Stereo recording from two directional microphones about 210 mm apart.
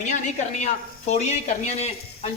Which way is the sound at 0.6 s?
35° left (ahead or behind).